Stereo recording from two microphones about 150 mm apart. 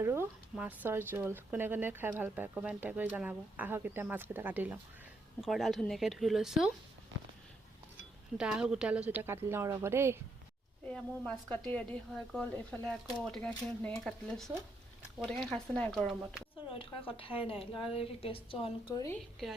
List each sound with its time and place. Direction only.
0.0 s speech: 15° right (ahead or behind)
5.4 s speech: centre (ahead or behind)
8.4 s speech: 5° right (ahead or behind)
10.8 s speech: 5° left (ahead or behind)
16.7 s a woman's voice: 35° left (ahead or behind)